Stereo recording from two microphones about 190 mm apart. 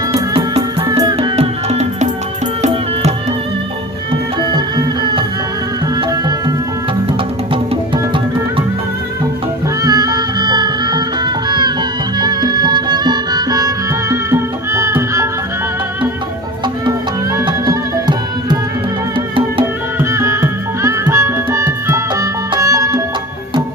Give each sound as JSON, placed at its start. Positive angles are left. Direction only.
{"t": 0.1, "sound": "music", "side_deg": -30}
{"t": 4.4, "sound": "music", "side_deg": -20}
{"t": 9.8, "sound": "music", "side_deg": -20}
{"t": 17.3, "sound": "music", "side_deg": -25}
{"t": 20.0, "sound": "music", "side_deg": -15}